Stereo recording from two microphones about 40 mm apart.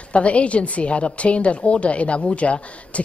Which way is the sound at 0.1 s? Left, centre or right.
Left.